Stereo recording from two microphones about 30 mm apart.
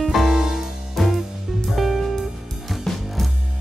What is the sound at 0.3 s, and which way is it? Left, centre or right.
Music, centre.